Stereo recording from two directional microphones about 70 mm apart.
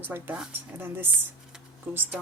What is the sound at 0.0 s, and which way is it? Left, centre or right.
Speech, right.